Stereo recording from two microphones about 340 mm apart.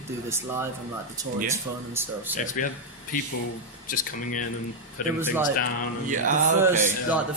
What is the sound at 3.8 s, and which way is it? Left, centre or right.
Speech, left.